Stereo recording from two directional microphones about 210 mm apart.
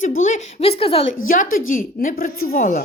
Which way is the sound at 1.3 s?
40° left (ahead or behind).